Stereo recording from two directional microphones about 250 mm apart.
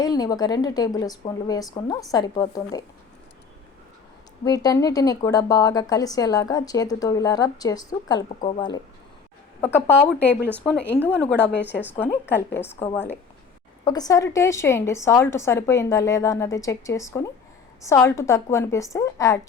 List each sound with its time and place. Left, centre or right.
0.0 s a woman's voice: centre
4.4 s a woman's voice: centre
9.6 s a woman's voice: centre